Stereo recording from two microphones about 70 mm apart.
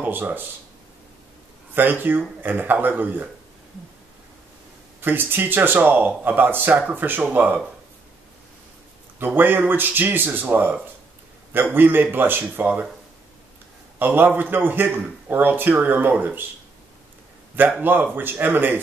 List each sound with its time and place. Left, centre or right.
0.0 s speech: right
1.7 s a man's voice: right
5.0 s a man's voice: right
9.2 s a man's voice: right
13.9 s a man's voice: right
17.6 s a man's voice: right